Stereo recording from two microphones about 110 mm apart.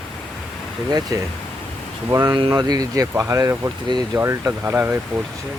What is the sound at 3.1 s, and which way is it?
Speech, 20° right (ahead or behind).